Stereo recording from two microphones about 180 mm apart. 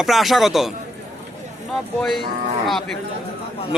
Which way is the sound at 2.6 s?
Centre (ahead or behind).